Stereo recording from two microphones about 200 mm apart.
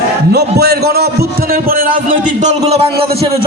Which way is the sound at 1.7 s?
40° right (ahead or behind).